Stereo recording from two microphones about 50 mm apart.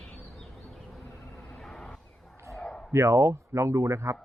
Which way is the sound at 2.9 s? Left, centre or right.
Right.